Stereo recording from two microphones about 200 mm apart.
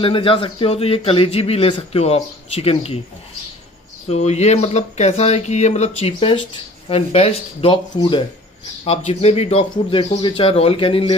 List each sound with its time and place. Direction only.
0.0 s a man's voice: 25° left (ahead or behind)
4.1 s a man's voice: 35° left (ahead or behind)